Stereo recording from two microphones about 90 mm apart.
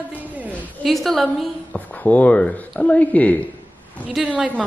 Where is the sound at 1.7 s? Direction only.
20° left (ahead or behind).